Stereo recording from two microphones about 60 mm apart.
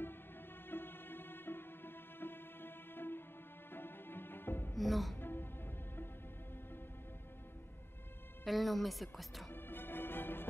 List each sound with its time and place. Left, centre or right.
0.7 s music: left
4.7 s music: centre
5.1 s music: left
8.5 s a woman's voice: centre
9.5 s music: left